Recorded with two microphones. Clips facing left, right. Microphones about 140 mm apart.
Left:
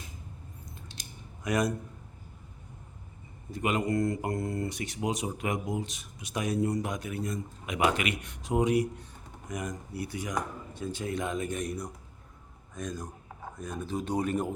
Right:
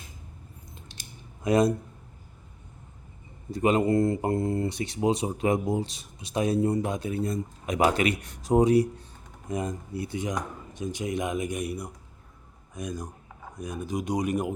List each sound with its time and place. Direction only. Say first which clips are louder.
1.5 s speech: right 6 dB; 25° right (ahead or behind)
3.5 s speech: right 6 dB; 30° right (ahead or behind); by 14.5 s 15° right (ahead or behind)